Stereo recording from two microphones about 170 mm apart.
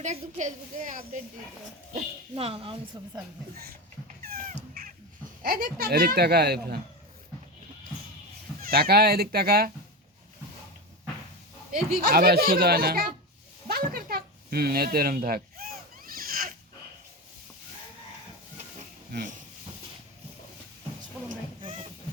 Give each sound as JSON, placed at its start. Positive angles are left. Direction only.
{"t": 0.0, "sound": "a woman's voice", "side_deg": -45}
{"t": 2.3, "sound": "a woman's voice", "side_deg": -35}
{"t": 4.2, "sound": "cat", "side_deg": -60}
{"t": 5.4, "sound": "speech", "side_deg": -65}
{"t": 8.6, "sound": "speech", "side_deg": -65}
{"t": 11.9, "sound": "speech", "side_deg": -65}
{"t": 13.7, "sound": "a sound", "side_deg": -65}